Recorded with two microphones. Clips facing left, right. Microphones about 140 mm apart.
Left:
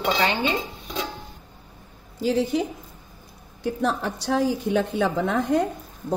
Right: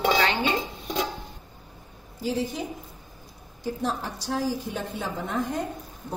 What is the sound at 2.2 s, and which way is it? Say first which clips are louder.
Speech: left 6 dB; 80° left.